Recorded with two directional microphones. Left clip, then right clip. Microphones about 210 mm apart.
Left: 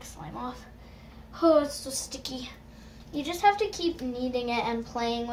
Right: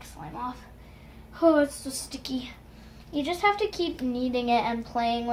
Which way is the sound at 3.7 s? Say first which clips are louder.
Right 1 dB; 35° right (ahead or behind).